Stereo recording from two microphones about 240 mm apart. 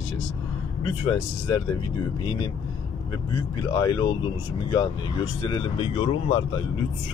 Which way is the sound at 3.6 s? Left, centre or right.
Centre.